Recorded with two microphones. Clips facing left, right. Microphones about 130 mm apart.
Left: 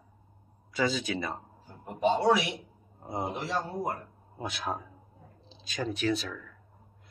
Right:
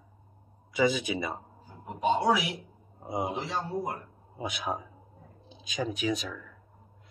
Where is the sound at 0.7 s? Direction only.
15° right (ahead or behind).